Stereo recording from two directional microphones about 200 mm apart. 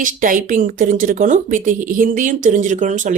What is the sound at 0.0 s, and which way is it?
A woman's voice, 40° right (ahead or behind).